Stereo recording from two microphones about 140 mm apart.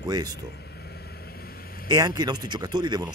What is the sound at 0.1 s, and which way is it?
Speech, 30° right (ahead or behind).